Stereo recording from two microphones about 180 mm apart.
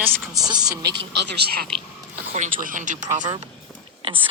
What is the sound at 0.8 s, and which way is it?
Speech, 70° right (ahead or behind).